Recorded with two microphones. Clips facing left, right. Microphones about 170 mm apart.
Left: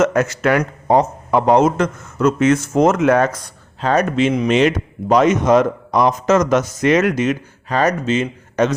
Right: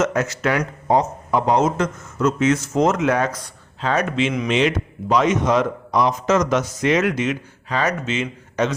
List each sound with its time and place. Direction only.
0.0 s a man's voice: 55° left (ahead or behind)